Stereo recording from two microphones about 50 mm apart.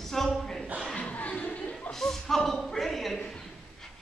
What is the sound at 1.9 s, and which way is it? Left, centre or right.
Speech, centre.